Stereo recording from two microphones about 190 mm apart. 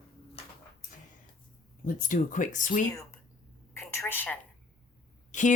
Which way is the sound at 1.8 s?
45° left (ahead or behind).